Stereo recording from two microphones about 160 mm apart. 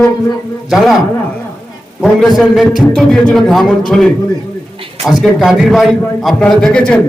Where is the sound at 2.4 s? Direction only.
Centre (ahead or behind).